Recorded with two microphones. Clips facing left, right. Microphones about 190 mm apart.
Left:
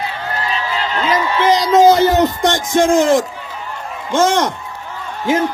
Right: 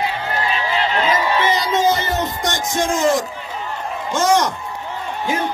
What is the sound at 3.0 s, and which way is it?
A man's voice, 55° left (ahead or behind).